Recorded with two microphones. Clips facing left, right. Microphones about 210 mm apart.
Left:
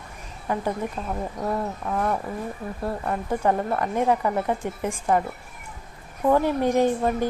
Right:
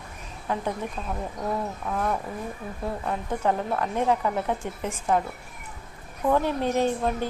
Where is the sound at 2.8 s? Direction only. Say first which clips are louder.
Left 2 dB; 5° left (ahead or behind).